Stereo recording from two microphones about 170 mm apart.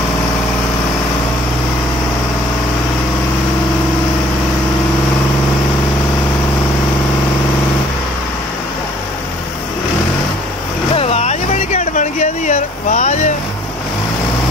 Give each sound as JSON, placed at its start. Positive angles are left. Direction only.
{"t": 11.0, "sound": "vehicle", "side_deg": 40}